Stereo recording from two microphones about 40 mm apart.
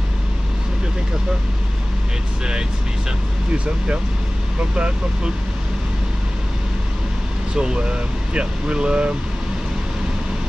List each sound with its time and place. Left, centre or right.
3.5 s speech: right
7.5 s speech: right